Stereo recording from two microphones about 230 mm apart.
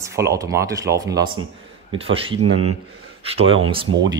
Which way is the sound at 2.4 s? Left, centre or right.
Right.